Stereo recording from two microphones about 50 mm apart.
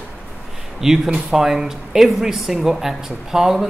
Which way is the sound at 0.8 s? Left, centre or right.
Centre.